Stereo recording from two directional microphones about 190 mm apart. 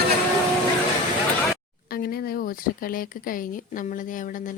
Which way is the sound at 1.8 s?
55° left (ahead or behind).